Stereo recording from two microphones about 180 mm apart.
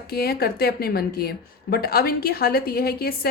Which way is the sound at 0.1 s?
60° left (ahead or behind).